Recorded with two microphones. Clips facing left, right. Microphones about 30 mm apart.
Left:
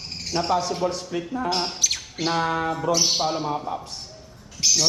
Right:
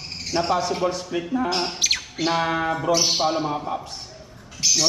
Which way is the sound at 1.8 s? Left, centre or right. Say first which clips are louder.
Right 3 dB; right.